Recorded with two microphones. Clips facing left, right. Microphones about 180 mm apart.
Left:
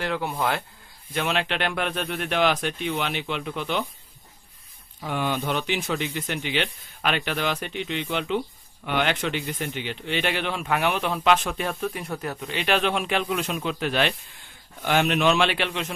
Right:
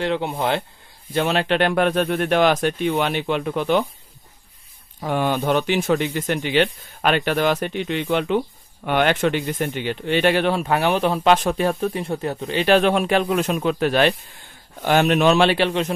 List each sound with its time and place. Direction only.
0.0 s speech: 25° right (ahead or behind); by 3.8 s 50° right (ahead or behind)
5.0 s a man's voice: 45° right (ahead or behind)